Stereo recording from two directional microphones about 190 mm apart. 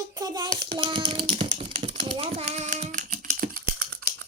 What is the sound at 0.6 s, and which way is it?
A child's voice, 25° right (ahead or behind).